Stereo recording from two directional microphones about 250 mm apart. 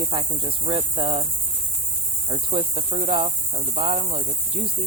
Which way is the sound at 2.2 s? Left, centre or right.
Right.